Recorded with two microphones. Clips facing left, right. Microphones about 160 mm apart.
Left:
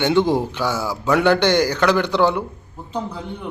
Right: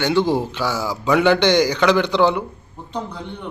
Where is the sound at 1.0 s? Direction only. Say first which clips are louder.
Right 1 dB; centre (ahead or behind).